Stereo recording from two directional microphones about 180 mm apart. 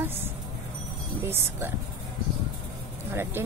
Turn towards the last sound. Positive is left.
turn(degrees=-15)  # may be behind; listen again after turning